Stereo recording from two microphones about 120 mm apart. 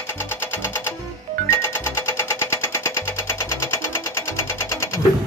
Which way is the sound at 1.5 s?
25° left (ahead or behind).